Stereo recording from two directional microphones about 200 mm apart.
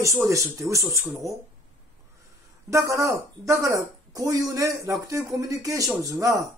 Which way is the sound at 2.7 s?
15° right (ahead or behind).